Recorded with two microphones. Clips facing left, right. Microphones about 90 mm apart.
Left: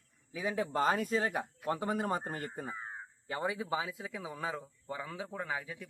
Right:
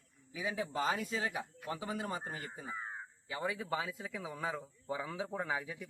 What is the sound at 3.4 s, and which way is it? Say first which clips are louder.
Speech: left 2 dB; 20° left (ahead or behind).